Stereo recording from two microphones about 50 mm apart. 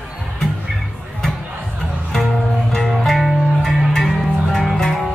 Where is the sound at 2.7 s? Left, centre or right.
Centre.